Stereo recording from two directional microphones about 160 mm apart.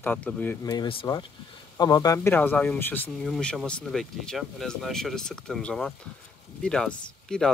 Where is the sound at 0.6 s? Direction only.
30° left (ahead or behind); by 3.0 s 10° left (ahead or behind).